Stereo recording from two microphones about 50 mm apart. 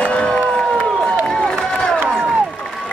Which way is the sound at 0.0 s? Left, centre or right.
Left.